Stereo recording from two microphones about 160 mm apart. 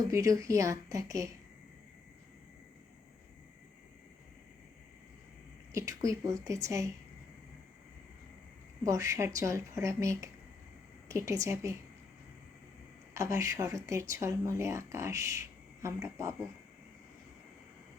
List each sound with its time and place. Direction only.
0.1 s a woman's voice: 20° right (ahead or behind)
5.7 s a woman's voice: 20° right (ahead or behind)
8.8 s a woman's voice: 20° right (ahead or behind)
13.1 s speech: 20° right (ahead or behind)